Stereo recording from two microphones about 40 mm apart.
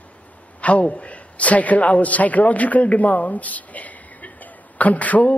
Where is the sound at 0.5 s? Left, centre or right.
Left.